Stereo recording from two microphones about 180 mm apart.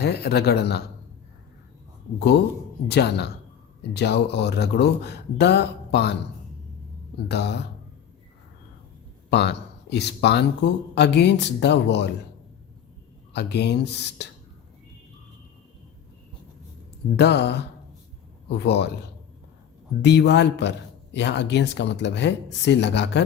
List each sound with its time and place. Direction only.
0.0 s speech: 65° left (ahead or behind)
2.1 s speech: 65° left (ahead or behind)
7.3 s speech: 70° left (ahead or behind)
9.3 s speech: 70° left (ahead or behind)
13.3 s speech: 70° left (ahead or behind)
17.2 s speech: 65° left (ahead or behind)
20.0 s speech: 70° left (ahead or behind)